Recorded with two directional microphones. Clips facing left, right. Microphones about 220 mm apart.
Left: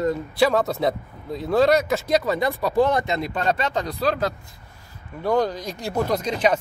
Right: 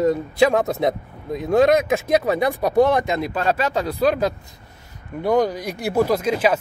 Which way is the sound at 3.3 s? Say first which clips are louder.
Right 2 dB; 5° right (ahead or behind).